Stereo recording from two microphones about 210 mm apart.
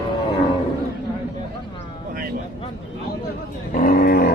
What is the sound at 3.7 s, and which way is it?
Roaring cats, 40° left (ahead or behind).